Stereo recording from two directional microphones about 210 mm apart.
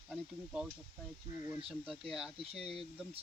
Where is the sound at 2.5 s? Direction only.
30° right (ahead or behind).